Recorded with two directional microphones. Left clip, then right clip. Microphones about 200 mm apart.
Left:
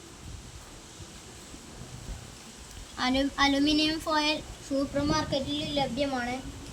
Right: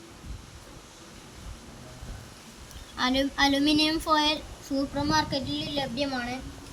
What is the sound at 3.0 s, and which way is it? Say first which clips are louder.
A woman's voice: right 1 dB; 10° right (ahead or behind).